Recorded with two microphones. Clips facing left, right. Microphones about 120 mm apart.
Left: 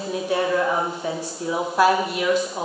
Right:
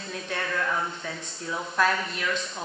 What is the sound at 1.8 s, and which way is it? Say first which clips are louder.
Speech: left 7 dB; 10° left (ahead or behind).